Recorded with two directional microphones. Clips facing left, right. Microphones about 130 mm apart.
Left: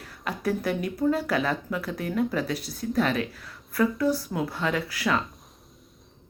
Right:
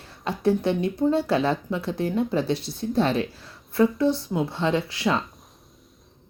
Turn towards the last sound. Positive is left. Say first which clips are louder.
# right 3 dB
turn(degrees=-25)  # may be behind; listen again after turning